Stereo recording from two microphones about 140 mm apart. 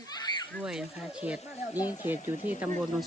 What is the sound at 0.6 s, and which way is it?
Speech, 5° right (ahead or behind).